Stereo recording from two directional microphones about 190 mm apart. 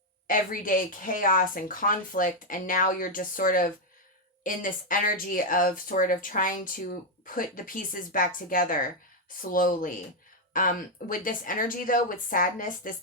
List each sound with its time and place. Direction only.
0.3 s speech: 45° left (ahead or behind)